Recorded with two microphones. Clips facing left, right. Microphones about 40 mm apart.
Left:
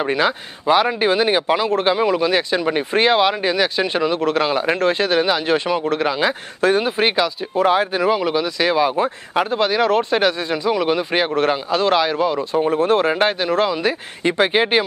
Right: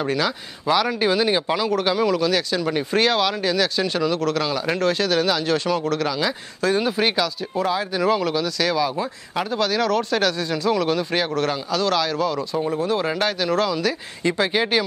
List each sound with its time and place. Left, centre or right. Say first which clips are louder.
0.0 s speech: left 4 dB; left
7.6 s speech: left 7 dB; left
8.0 s speech: left 2 dB; left
13.1 s speech: left 4 dB; left